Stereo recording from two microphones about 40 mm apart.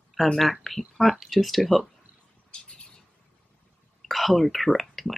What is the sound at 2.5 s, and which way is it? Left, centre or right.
Bird, left.